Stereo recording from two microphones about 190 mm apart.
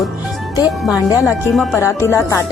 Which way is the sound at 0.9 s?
Centre (ahead or behind).